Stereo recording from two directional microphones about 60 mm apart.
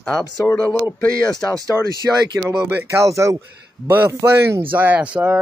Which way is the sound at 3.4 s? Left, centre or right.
Right.